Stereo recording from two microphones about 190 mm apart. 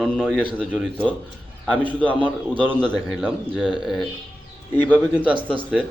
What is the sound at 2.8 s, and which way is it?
Speech, 5° left (ahead or behind).